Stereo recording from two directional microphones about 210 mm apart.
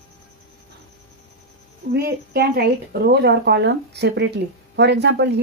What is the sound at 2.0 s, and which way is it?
Speech, 50° right (ahead or behind).